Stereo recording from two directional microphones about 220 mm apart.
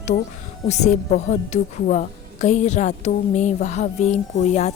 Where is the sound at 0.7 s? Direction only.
30° left (ahead or behind).